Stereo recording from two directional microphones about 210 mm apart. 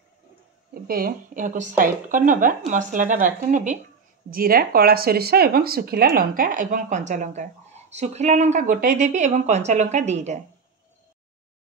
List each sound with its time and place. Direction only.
0.7 s speech: 45° right (ahead or behind)